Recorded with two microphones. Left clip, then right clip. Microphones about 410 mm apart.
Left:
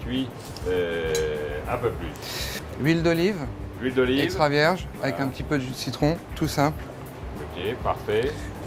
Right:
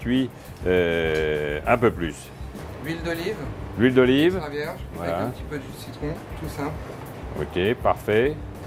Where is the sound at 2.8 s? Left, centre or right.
Left.